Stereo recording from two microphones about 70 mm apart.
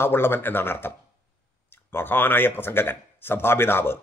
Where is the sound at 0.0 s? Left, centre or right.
Left.